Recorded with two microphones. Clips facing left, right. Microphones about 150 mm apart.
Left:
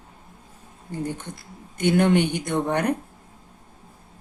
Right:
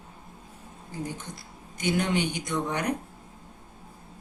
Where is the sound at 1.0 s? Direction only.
60° left (ahead or behind).